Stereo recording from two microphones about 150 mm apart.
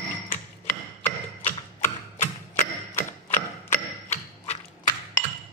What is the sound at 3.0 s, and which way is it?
Mechanisms, 15° left (ahead or behind).